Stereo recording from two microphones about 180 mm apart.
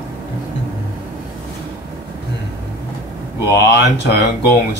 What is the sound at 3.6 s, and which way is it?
Speech, 70° left (ahead or behind).